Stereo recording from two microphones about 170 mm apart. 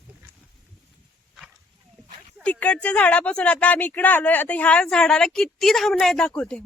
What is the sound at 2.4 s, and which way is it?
Speech, 10° left (ahead or behind).